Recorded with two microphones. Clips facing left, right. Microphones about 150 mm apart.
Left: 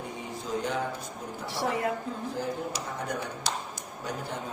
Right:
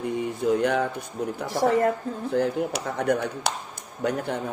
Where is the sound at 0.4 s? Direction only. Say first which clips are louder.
Right 9 dB; 65° right (ahead or behind).